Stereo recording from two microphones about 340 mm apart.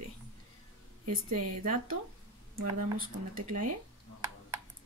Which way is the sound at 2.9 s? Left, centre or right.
Right.